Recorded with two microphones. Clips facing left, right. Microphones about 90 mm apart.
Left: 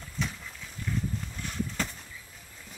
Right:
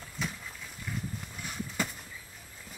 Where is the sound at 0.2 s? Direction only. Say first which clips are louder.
Left 2 dB; 5° right (ahead or behind).